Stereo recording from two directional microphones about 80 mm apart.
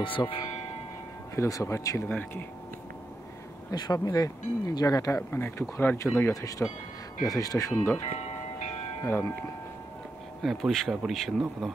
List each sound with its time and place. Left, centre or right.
0.0 s speech: left
1.3 s speech: left
2.0 s speech: centre
3.7 s speech: left
5.3 s speech: left
9.0 s speech: left
10.4 s speech: centre